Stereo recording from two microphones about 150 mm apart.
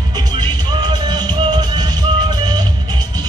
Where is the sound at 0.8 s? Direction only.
30° right (ahead or behind).